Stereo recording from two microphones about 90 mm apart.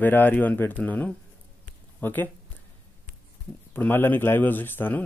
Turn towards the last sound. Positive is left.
turn(degrees=20)  # may be behind; listen again after turning